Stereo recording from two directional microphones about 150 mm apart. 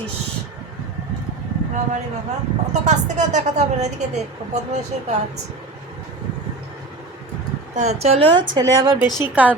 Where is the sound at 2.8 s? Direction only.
50° right (ahead or behind).